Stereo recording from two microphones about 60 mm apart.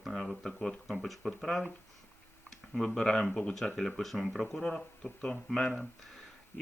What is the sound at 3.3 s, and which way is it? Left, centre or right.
Speech, centre.